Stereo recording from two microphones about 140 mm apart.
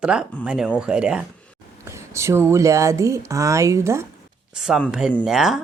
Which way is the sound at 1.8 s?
20° right (ahead or behind).